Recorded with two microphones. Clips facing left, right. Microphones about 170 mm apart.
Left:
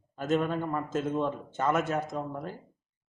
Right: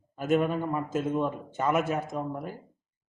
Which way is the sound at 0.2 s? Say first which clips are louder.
Right 2 dB; 10° right (ahead or behind).